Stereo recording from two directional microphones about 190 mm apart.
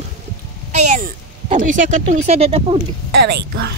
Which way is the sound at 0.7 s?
40° right (ahead or behind).